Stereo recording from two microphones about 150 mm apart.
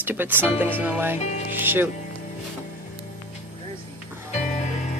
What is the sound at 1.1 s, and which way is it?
Speech, 50° left (ahead or behind).